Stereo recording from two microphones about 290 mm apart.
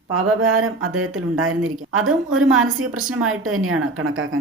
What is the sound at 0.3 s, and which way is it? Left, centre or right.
A woman's voice, right.